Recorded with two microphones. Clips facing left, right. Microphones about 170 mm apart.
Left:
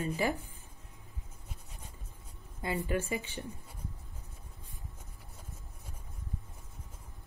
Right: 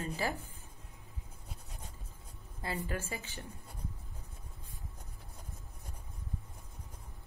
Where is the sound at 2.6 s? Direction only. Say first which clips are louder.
Left 5 dB; 35° right (ahead or behind).